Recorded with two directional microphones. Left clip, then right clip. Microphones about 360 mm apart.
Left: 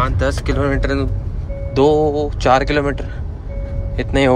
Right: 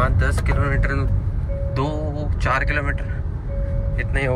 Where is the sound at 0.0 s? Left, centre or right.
Centre.